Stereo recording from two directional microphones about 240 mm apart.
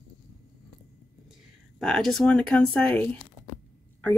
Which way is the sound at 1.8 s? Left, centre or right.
Centre.